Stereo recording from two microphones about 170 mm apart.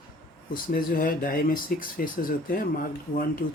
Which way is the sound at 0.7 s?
55° left (ahead or behind).